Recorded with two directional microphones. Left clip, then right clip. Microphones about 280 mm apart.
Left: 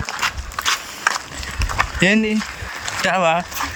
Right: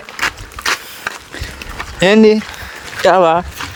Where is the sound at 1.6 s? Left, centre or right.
Centre.